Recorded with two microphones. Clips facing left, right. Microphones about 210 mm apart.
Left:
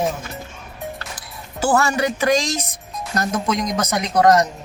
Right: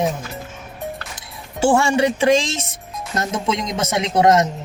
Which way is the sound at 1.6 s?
30° right (ahead or behind).